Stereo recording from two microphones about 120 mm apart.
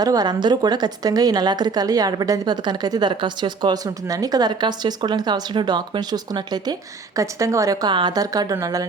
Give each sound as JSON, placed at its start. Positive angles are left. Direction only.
{"t": 0.0, "sound": "a woman's voice", "side_deg": -35}